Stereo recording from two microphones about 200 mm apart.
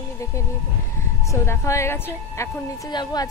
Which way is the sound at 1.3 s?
15° left (ahead or behind).